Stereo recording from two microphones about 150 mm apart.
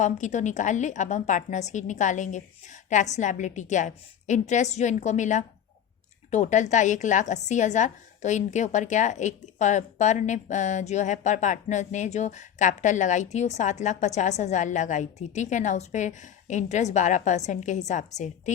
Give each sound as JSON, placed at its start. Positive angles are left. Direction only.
{"t": 0.0, "sound": "a woman's voice", "side_deg": 55}